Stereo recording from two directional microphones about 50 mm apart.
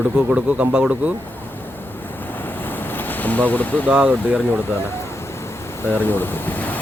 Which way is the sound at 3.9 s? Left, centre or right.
Centre.